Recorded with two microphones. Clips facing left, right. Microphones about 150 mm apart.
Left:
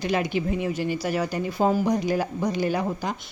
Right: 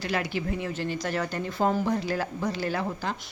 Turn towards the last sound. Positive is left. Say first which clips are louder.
# left 4 dB
turn(degrees=15)  # may be behind; listen again after turning